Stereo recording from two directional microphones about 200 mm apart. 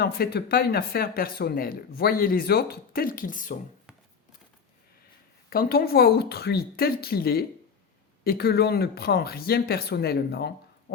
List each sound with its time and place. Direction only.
0.0 s speech: 50° left (ahead or behind)
5.5 s speech: 50° left (ahead or behind)